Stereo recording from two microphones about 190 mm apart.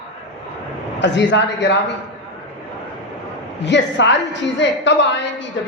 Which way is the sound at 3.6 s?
65° left (ahead or behind).